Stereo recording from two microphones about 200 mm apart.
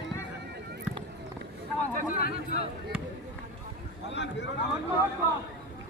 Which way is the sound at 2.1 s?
45° left (ahead or behind).